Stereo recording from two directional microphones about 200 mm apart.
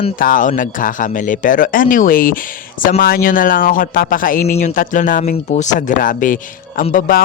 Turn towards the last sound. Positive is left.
turn(degrees=45)  # may be behind; listen again after turning